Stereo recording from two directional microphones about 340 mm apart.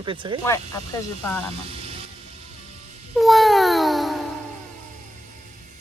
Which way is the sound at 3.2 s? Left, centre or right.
Centre.